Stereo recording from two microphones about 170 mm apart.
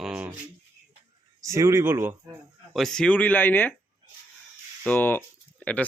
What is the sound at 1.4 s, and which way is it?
Speech, 20° right (ahead or behind).